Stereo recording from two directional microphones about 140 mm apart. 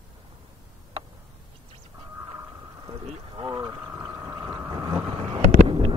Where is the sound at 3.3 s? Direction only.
30° right (ahead or behind).